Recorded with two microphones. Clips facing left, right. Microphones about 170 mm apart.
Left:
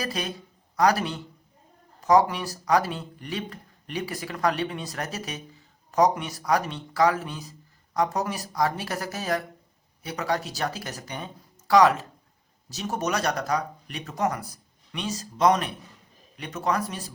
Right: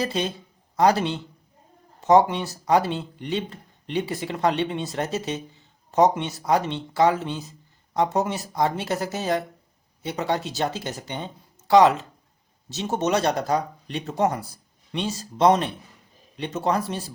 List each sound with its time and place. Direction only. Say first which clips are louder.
0.0 s speech: right 5 dB; 25° right (ahead or behind)